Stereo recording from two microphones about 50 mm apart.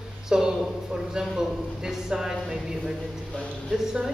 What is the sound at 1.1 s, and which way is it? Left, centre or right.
A man's voice, centre.